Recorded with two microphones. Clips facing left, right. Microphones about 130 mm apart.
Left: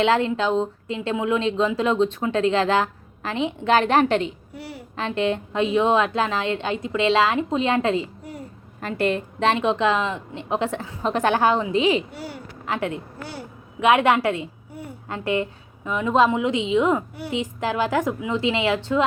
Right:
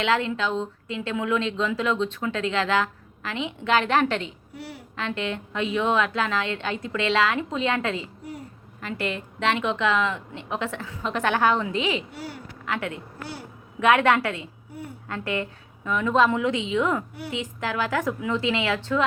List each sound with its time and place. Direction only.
0.0 s a woman's voice: 35° left (ahead or behind)
1.1 s a woman's voice: 25° left (ahead or behind)
1.4 s a woman's voice: 40° left (ahead or behind)
4.5 s a woman's voice: 5° left (ahead or behind)
4.9 s a woman's voice: 35° left (ahead or behind)
8.8 s a woman's voice: 45° left (ahead or behind)
12.6 s a woman's voice: 25° left (ahead or behind)